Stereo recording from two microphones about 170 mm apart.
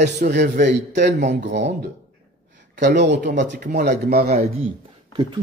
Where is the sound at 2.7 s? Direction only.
90° right.